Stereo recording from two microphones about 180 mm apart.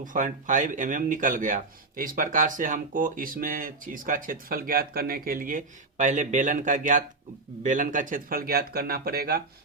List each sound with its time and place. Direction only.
0.0 s speech: 45° right (ahead or behind)